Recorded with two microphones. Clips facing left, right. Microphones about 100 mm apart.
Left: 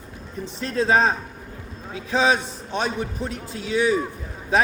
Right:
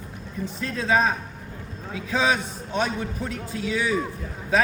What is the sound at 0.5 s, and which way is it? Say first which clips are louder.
Speech: left 3 dB; 30° left (ahead or behind).